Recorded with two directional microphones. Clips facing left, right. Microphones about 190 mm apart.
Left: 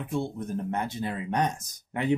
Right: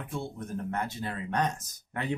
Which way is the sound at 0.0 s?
20° left (ahead or behind).